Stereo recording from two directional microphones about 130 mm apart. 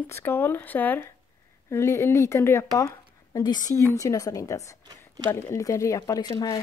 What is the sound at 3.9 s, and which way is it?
Speech, 25° left (ahead or behind).